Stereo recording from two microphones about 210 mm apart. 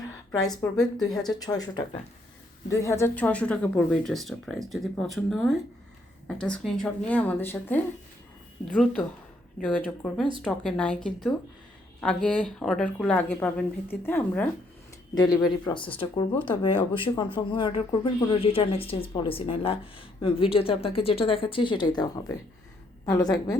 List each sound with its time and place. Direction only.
0.6 s speech: 10° left (ahead or behind)
15.1 s speech: 20° left (ahead or behind)